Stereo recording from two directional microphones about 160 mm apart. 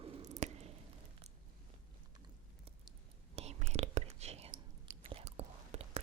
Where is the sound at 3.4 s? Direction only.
45° right (ahead or behind).